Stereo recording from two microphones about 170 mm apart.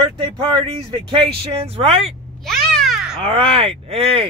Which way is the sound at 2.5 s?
Centre (ahead or behind).